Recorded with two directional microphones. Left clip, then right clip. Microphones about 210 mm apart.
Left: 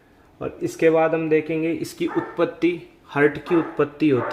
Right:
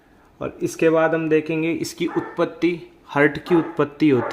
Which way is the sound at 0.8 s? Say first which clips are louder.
Even; 25° right (ahead or behind).